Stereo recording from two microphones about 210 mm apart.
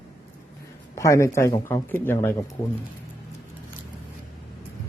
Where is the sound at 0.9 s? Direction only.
15° left (ahead or behind).